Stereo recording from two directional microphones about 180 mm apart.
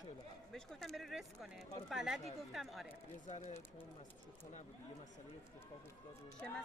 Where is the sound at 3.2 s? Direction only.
45° left (ahead or behind).